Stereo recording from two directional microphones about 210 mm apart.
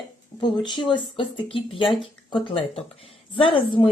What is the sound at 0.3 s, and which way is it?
A woman's voice, 20° left (ahead or behind).